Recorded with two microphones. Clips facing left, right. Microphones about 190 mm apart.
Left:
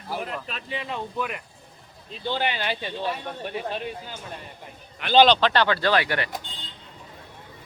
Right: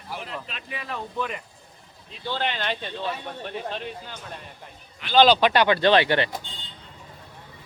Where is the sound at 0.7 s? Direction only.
20° left (ahead or behind).